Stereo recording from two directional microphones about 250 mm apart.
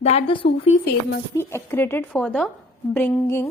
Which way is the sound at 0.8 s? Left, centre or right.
Left.